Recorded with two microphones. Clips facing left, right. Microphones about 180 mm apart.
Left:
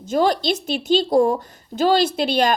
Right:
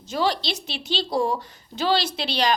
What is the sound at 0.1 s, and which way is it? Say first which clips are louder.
Speech: left 6 dB; 50° left (ahead or behind).